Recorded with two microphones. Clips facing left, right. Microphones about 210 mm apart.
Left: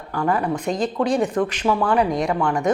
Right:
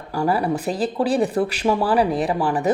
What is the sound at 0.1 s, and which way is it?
Speech, 10° right (ahead or behind).